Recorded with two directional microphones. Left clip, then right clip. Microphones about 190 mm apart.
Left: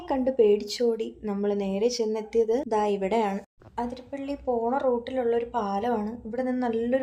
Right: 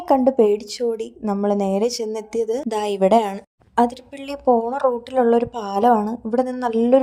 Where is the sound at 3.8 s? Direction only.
50° right (ahead or behind).